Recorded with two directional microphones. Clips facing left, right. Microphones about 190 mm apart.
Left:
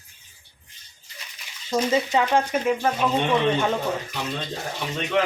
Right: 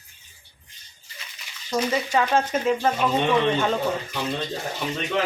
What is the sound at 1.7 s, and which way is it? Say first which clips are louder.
A woman's voice: left 2 dB; 20° left (ahead or behind).